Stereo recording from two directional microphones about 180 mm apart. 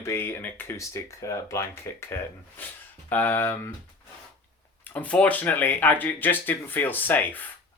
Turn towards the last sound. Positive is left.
turn(degrees=10)  # may be behind; listen again after turning